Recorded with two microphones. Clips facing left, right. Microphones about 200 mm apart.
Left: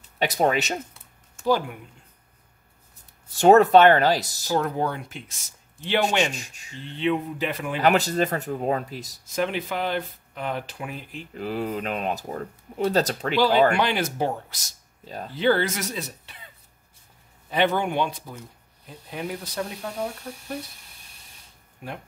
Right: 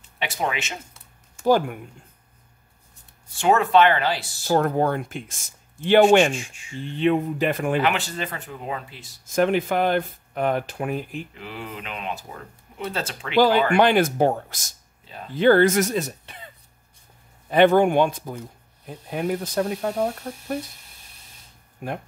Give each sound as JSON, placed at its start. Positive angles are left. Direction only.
{"t": 0.2, "sound": "speech", "side_deg": 40}
{"t": 1.4, "sound": "speech", "side_deg": -50}
{"t": 3.3, "sound": "speech", "side_deg": 40}
{"t": 4.5, "sound": "speech", "side_deg": -50}
{"t": 6.3, "sound": "speech", "side_deg": 40}
{"t": 6.8, "sound": "speech", "side_deg": -50}
{"t": 7.8, "sound": "speech", "side_deg": 40}
{"t": 9.2, "sound": "speech", "side_deg": -50}
{"t": 11.3, "sound": "speech", "side_deg": 40}
{"t": 13.7, "sound": "speech", "side_deg": -50}
{"t": 15.0, "sound": "speech", "side_deg": 40}
{"t": 15.3, "sound": "speech", "side_deg": -50}
{"t": 17.5, "sound": "speech", "side_deg": -50}
{"t": 21.8, "sound": "speech", "side_deg": -50}